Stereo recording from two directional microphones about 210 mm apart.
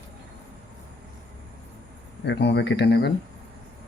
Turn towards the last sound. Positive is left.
turn(degrees=55)  # may be behind; listen again after turning